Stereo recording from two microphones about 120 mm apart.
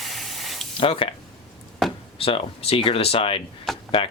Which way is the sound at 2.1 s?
50° left (ahead or behind).